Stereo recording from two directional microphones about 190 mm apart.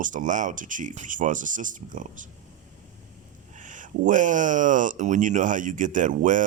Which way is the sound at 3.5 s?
40° right (ahead or behind).